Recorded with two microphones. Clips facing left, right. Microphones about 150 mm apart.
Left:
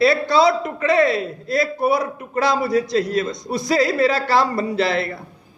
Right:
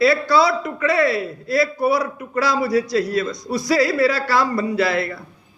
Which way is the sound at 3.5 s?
25° left (ahead or behind).